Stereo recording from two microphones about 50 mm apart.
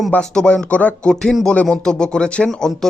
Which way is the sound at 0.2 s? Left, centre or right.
Centre.